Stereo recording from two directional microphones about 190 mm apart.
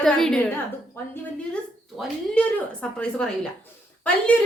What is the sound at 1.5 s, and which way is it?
A woman's voice, 5° left (ahead or behind).